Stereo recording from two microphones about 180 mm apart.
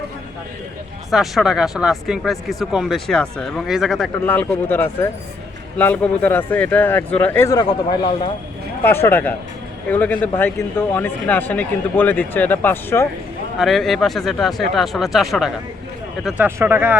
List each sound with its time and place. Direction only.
1.1 s speech: centre (ahead or behind)
4.3 s a man's voice: 10° left (ahead or behind)
7.6 s a man's voice: 25° left (ahead or behind)
8.8 s a man's voice: 10° left (ahead or behind)
13.6 s speech: centre (ahead or behind)